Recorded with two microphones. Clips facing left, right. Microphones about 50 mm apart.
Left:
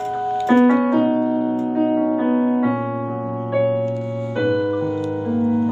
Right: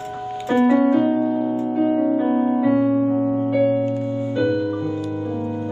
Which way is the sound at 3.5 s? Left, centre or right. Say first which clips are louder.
Left 2 dB; centre.